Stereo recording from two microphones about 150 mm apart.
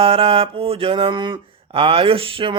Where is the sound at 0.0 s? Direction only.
40° right (ahead or behind).